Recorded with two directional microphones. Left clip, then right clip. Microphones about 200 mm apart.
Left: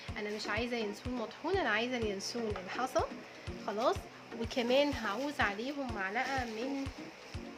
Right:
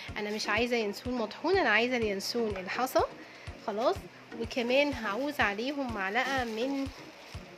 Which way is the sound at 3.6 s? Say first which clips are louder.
Right 3 dB; 20° right (ahead or behind).